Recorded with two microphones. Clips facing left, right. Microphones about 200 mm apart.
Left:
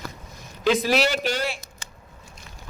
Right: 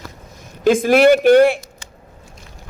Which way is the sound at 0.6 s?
50° right (ahead or behind).